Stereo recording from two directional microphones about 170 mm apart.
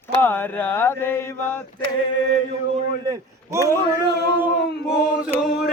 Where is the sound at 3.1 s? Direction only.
20° right (ahead or behind).